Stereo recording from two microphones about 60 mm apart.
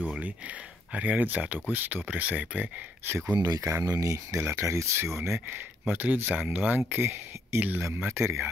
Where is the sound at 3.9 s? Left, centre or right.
Right.